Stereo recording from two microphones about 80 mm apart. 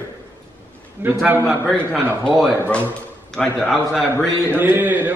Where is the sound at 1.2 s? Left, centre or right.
Right.